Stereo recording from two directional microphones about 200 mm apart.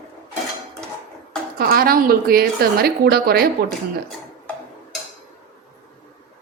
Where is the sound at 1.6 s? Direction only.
50° right (ahead or behind).